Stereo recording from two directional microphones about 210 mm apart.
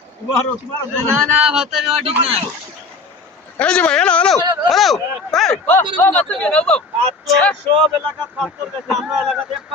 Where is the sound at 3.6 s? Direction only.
5° left (ahead or behind).